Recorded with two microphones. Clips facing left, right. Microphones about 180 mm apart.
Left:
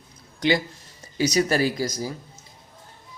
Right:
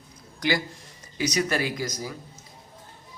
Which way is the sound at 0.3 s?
25° left (ahead or behind).